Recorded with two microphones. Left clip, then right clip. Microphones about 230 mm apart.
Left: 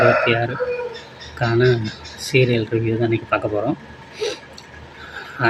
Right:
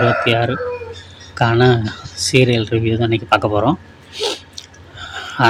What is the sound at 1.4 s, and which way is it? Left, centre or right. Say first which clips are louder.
Speech: right 4 dB; right.